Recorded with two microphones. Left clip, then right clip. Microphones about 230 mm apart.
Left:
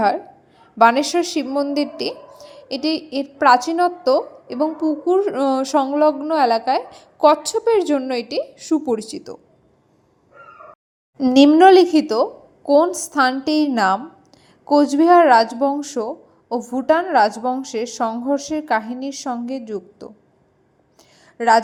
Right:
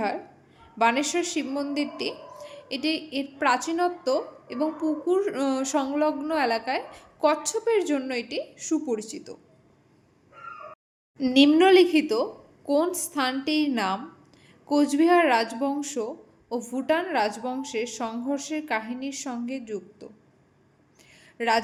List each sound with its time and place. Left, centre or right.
0.8 s speech: left
11.2 s speech: left
21.3 s speech: left